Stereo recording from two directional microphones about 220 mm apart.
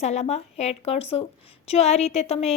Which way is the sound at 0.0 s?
30° left (ahead or behind).